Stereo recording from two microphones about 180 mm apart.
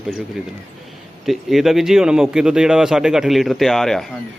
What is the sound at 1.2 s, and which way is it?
Speech, centre (ahead or behind).